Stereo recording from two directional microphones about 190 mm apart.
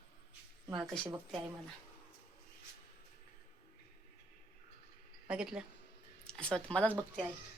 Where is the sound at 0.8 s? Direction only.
5° left (ahead or behind).